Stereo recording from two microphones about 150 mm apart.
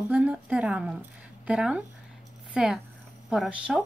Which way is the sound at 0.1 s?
10° right (ahead or behind).